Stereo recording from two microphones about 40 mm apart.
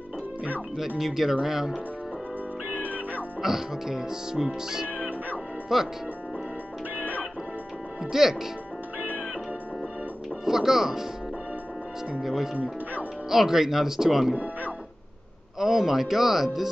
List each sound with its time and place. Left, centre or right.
0.9 s speech: centre
2.7 s music: right
3.4 s speech: centre
4.8 s music: right
5.7 s speech: centre
7.0 s music: right
8.0 s speech: centre
10.4 s speech: centre
12.2 s speech: centre
14.3 s speech: right
15.6 s speech: centre